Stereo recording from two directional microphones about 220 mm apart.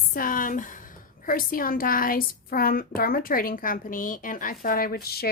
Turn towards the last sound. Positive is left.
turn(degrees=45)  # may be behind; listen again after turning